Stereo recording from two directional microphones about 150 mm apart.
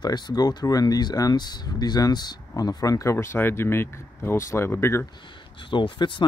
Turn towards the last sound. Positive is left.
turn(degrees=30)  # may be behind; listen again after turning